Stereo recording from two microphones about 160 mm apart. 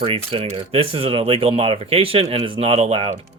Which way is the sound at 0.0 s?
35° right (ahead or behind).